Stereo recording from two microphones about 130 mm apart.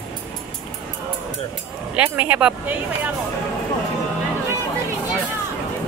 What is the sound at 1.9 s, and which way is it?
Speech, 10° right (ahead or behind).